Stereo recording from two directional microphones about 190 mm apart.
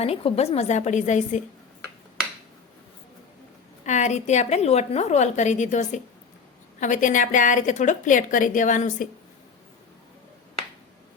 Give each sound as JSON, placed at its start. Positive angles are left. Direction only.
{"t": 0.0, "sound": "a woman's voice", "side_deg": 30}
{"t": 3.8, "sound": "a woman's voice", "side_deg": 40}